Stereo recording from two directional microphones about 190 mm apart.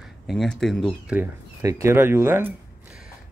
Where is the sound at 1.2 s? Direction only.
15° right (ahead or behind).